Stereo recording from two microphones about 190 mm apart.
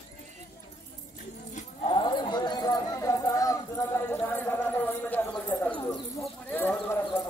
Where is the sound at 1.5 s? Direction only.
40° left (ahead or behind).